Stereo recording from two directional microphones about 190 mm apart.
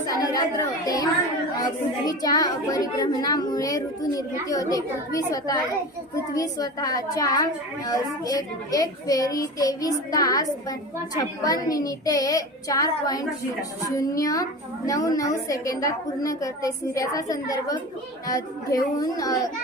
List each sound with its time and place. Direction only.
0.0 s a child's voice: 20° left (ahead or behind)